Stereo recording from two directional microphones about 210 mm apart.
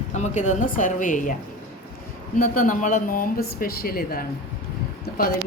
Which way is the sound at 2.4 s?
40° left (ahead or behind).